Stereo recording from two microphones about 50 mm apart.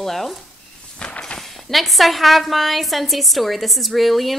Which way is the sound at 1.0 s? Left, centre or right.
Centre.